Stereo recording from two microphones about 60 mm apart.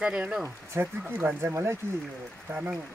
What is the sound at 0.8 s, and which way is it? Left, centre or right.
Speech, right.